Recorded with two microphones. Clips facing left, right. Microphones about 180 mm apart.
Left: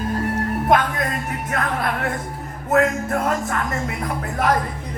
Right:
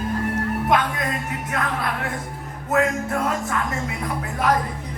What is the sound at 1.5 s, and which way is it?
Speech, 50° left (ahead or behind).